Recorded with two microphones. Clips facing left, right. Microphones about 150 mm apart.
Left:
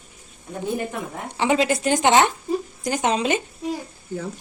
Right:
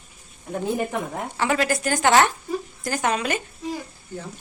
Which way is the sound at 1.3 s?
20° left (ahead or behind).